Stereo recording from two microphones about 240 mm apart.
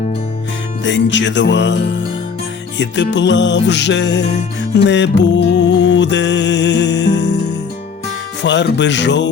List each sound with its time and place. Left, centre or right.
0.9 s music: left
8.4 s music: left